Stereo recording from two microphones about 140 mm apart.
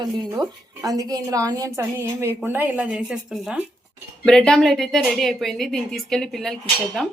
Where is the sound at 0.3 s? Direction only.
25° right (ahead or behind); by 3.6 s 5° right (ahead or behind).